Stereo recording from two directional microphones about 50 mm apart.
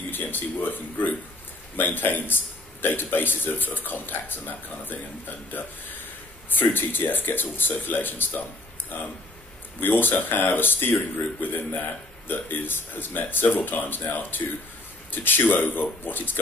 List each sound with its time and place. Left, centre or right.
0.1 s a man's voice: left
6.5 s a man's voice: left